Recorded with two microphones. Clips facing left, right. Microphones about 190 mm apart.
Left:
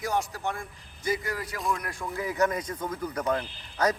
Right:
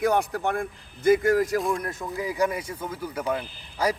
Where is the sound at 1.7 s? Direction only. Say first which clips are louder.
Right 4 dB; 25° right (ahead or behind).